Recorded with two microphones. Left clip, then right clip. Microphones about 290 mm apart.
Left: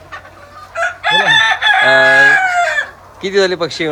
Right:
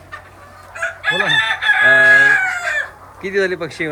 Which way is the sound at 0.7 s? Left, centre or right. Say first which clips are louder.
Left 5 dB; left.